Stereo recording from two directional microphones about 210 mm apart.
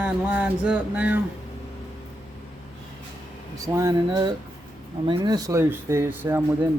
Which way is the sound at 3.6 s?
15° right (ahead or behind).